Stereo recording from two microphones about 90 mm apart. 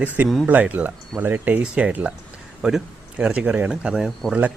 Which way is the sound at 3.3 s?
10° right (ahead or behind).